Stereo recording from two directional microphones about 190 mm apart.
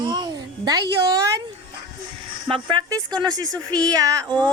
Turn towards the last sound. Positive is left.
turn(degrees=-20)  # may be behind; listen again after turning